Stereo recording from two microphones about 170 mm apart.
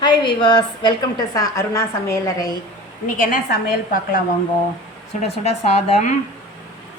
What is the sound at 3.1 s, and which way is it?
A woman's voice, 55° left (ahead or behind).